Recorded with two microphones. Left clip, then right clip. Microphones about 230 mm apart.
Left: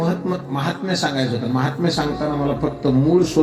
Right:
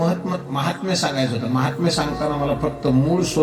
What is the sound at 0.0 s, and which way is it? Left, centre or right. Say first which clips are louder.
Speech: even; right.